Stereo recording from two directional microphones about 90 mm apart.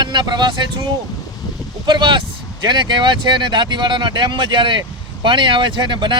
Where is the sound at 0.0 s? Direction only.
55° right (ahead or behind).